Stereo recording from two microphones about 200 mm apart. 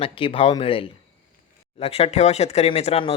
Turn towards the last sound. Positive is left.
turn(degrees=30)  # may be behind; listen again after turning